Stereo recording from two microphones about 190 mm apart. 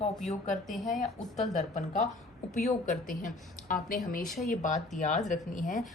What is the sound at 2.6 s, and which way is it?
A woman's voice, 40° left (ahead or behind).